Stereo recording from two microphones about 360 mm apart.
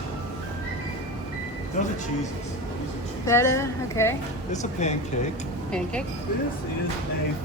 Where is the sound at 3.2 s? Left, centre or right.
Centre.